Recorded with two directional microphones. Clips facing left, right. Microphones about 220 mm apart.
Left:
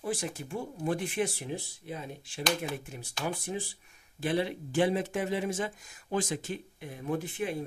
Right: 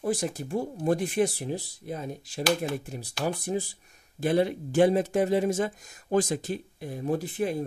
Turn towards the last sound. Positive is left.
turn(degrees=-40)  # may be behind; listen again after turning